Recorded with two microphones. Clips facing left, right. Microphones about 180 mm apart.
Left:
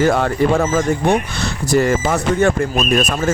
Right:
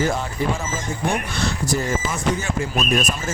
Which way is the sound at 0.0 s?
70° left (ahead or behind).